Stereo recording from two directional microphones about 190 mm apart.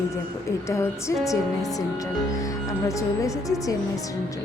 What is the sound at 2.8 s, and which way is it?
Speech, 15° left (ahead or behind).